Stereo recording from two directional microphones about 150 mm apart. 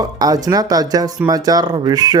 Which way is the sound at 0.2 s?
25° right (ahead or behind).